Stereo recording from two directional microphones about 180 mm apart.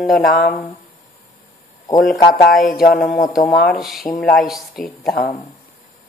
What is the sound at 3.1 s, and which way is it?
Speech, 45° left (ahead or behind).